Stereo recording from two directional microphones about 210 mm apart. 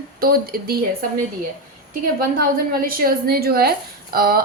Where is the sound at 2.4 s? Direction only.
45° right (ahead or behind).